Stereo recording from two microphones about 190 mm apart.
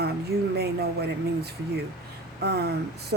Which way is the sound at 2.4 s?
60° right (ahead or behind).